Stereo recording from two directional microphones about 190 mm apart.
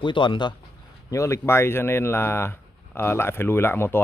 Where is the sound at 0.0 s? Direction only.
25° left (ahead or behind).